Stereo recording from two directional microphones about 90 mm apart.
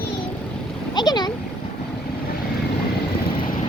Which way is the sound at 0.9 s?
50° left (ahead or behind).